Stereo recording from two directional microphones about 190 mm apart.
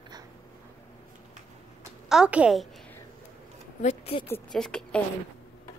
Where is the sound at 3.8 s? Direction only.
35° left (ahead or behind).